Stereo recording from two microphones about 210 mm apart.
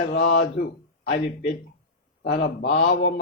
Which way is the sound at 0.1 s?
55° left (ahead or behind).